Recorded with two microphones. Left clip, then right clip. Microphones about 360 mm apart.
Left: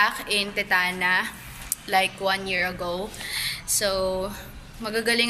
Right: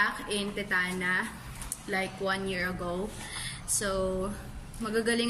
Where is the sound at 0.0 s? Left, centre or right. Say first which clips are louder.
Left 7 dB; centre.